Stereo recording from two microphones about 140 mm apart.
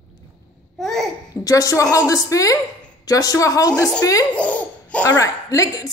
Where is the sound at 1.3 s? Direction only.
25° left (ahead or behind).